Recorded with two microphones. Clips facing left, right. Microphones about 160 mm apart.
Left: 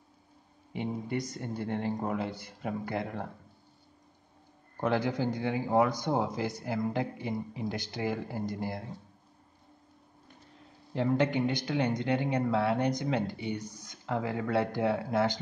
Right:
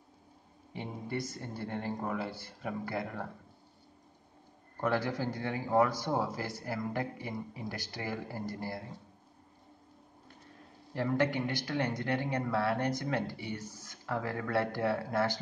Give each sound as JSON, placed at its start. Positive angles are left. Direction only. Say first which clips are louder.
{"t": 0.7, "sound": "speech", "louder": "left 4 dB", "side_deg": 20}
{"t": 4.7, "sound": "speech", "louder": "left 3 dB", "side_deg": 20}
{"t": 10.9, "sound": "speech", "louder": "left 3 dB", "side_deg": 20}